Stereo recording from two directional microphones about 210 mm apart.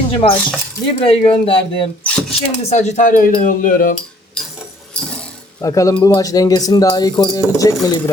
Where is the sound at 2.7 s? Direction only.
35° left (ahead or behind).